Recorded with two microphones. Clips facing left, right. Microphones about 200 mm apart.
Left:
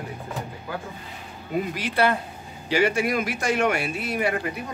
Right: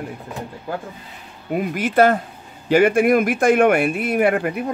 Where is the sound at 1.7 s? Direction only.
50° right (ahead or behind).